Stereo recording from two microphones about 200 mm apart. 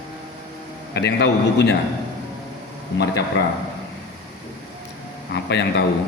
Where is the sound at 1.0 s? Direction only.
55° left (ahead or behind).